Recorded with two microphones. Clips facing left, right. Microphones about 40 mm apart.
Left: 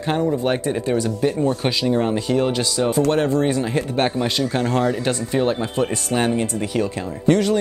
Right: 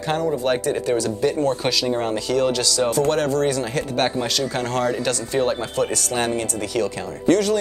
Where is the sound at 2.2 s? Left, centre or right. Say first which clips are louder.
Even; left.